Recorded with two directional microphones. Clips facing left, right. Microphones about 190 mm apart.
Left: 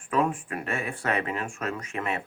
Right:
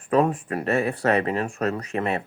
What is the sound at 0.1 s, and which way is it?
Speech, 40° right (ahead or behind).